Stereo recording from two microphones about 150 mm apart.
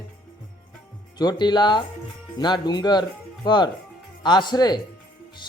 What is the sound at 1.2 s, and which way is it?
Speech, 30° left (ahead or behind).